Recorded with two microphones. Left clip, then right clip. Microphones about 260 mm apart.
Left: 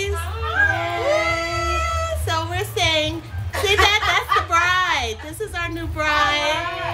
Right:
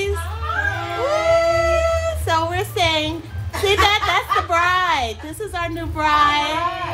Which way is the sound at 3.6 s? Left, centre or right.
Right.